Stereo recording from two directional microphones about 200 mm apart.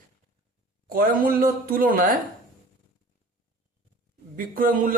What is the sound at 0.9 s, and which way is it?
Speech, 45° right (ahead or behind).